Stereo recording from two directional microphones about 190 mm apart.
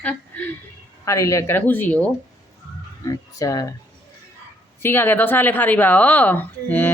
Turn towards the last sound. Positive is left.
turn(degrees=10)  # may be behind; listen again after turning